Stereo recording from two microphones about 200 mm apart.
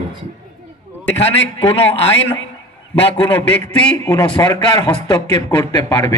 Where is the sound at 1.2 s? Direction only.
30° left (ahead or behind).